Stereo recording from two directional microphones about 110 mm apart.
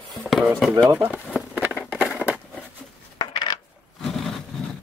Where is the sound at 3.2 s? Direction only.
45° left (ahead or behind).